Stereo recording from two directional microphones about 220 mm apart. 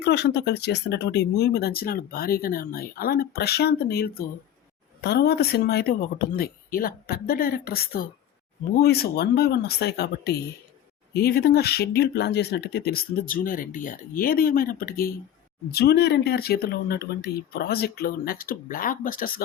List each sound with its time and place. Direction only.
0.0 s speech: 50° left (ahead or behind)